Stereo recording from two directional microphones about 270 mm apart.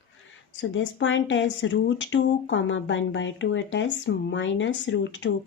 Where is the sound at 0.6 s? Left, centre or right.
Left.